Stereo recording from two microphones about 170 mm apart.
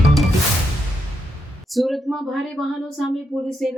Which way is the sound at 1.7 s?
Centre (ahead or behind).